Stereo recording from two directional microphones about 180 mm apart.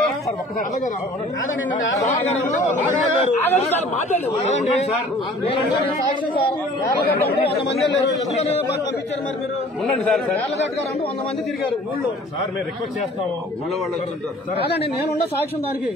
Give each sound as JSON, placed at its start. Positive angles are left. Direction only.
{"t": 3.2, "sound": "speech", "side_deg": 35}